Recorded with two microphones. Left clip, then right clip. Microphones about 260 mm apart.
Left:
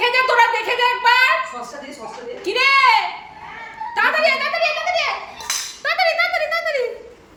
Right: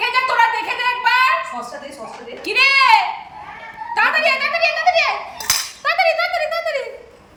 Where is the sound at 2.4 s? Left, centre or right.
Centre.